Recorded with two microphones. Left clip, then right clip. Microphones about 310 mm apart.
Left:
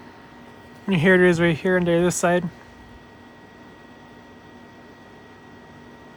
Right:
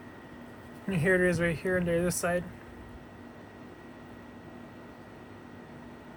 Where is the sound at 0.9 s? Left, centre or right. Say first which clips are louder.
Left 9 dB; centre.